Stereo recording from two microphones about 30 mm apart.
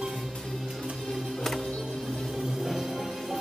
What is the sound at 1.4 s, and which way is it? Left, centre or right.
Music, centre.